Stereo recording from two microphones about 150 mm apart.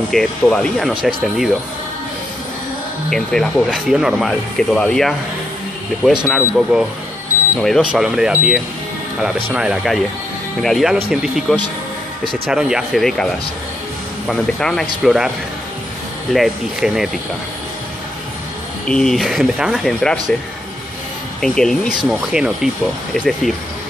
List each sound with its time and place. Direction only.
0.1 s speech: 5° left (ahead or behind)
3.1 s speech: 5° left (ahead or behind)
6.2 s speech: centre (ahead or behind)
16.3 s speech: centre (ahead or behind)
18.9 s speech: 5° left (ahead or behind)
21.4 s speech: 5° left (ahead or behind)